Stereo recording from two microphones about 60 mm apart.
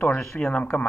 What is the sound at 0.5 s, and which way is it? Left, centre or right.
Speech, left.